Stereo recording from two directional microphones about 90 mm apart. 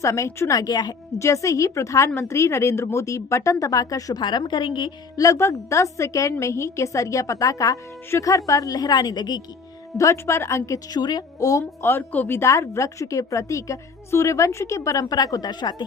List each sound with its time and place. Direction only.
0.0 s a woman's voice: 35° left (ahead or behind)
0.5 s a woman's voice: 45° left (ahead or behind)
1.2 s a woman's voice: 35° left (ahead or behind)
4.2 s a woman's voice: 55° left (ahead or behind)
5.1 s a woman's voice: 40° left (ahead or behind)
10.0 s a woman's voice: 35° left (ahead or behind)
10.9 s a woman's voice: 50° left (ahead or behind)
11.6 s speech: 25° left (ahead or behind)
12.4 s a woman's voice: 35° left (ahead or behind); by 15.7 s 50° left (ahead or behind)